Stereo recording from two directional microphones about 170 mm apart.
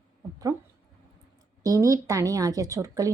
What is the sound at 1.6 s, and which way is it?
A woman's voice, 20° right (ahead or behind).